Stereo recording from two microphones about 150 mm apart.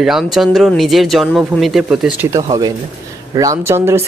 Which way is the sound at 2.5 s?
20° right (ahead or behind).